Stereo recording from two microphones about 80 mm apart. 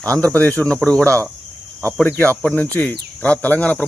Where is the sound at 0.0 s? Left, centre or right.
Centre.